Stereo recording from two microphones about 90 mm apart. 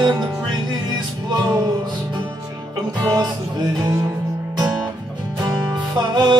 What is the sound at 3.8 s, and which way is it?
Music, 40° right (ahead or behind).